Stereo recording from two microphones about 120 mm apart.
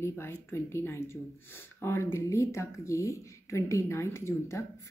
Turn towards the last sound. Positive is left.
turn(degrees=25)  # may be behind; listen again after turning